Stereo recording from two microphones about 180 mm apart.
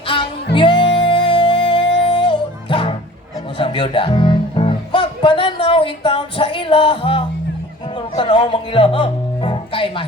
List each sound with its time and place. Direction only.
0.5 s music: 25° left (ahead or behind)
3.6 s speech: 25° left (ahead or behind)